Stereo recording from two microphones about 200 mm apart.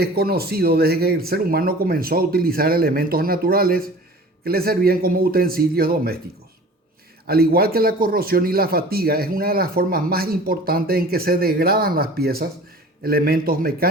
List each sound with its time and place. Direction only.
0.0 s speech: 50° right (ahead or behind)
7.3 s speech: 50° right (ahead or behind)